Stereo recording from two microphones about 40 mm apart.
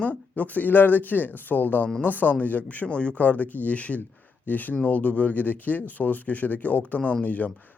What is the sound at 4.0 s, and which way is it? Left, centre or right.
Speech, left.